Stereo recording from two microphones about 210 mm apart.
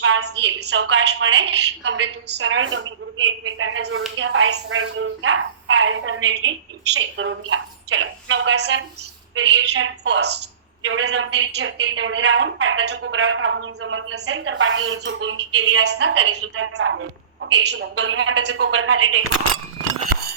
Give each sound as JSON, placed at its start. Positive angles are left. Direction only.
{"t": 0.2, "sound": "a woman's voice", "side_deg": -55}
{"t": 2.4, "sound": "a woman's voice", "side_deg": -70}
{"t": 9.6, "sound": "a woman's voice", "side_deg": -90}
{"t": 10.0, "sound": "a woman's voice", "side_deg": -55}
{"t": 15.8, "sound": "a woman's voice", "side_deg": -55}
{"t": 17.4, "sound": "a woman's voice", "side_deg": -55}
{"t": 18.0, "sound": "a woman's voice", "side_deg": -70}